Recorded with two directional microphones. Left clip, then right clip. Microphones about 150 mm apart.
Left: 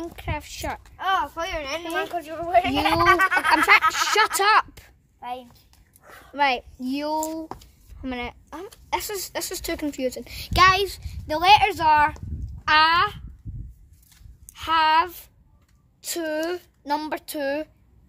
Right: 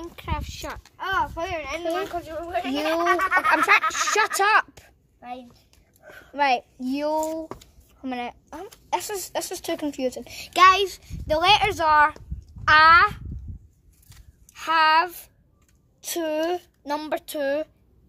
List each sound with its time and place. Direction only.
0.0 s speech: 20° left (ahead or behind)
0.5 s speech: 35° left (ahead or behind)
0.9 s a child's voice: 55° left (ahead or behind)
2.3 s speech: 80° left; by 3.6 s 65° left (ahead or behind)
3.9 s speech: 20° left (ahead or behind)
6.3 s a child's voice: 15° left (ahead or behind); by 13.2 s centre (ahead or behind)
14.5 s a child's voice: 10° left (ahead or behind)